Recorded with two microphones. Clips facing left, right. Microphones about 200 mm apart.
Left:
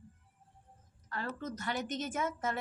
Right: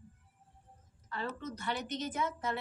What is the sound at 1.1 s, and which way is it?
A woman's voice, 45° left (ahead or behind).